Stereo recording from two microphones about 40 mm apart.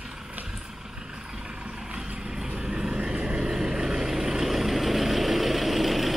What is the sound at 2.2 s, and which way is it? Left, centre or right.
Vehicle, centre.